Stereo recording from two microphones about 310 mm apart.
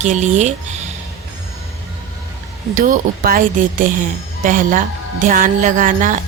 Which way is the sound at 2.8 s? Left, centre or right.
Right.